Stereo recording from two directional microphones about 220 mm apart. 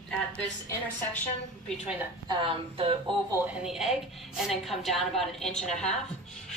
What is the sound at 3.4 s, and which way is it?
A woman's voice, 5° right (ahead or behind).